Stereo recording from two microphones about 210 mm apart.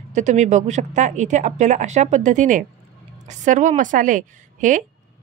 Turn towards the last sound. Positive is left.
turn(degrees=-35)  # may be behind; listen again after turning